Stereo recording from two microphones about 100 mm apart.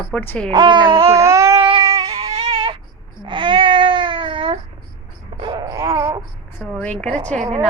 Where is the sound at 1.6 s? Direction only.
60° right (ahead or behind).